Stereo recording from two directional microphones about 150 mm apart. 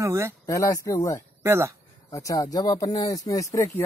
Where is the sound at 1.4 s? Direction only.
20° right (ahead or behind).